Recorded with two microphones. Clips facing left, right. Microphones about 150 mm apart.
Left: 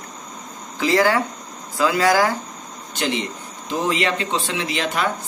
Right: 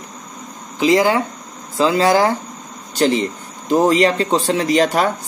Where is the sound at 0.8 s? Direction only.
20° right (ahead or behind).